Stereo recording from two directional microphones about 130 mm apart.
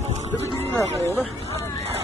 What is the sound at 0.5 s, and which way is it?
Speech, 15° left (ahead or behind).